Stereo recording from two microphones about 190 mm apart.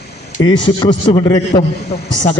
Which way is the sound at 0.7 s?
25° left (ahead or behind).